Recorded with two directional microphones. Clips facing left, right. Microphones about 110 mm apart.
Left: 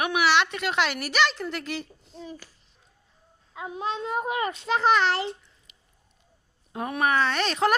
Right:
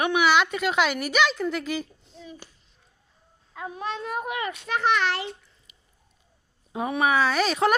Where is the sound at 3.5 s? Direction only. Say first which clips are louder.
Left 1 dB; 20° left (ahead or behind).